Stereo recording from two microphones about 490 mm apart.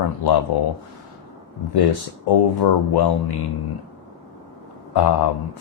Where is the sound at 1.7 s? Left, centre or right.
Left.